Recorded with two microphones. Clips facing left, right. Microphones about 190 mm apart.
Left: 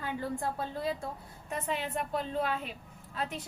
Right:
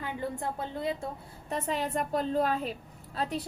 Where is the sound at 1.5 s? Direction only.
40° right (ahead or behind).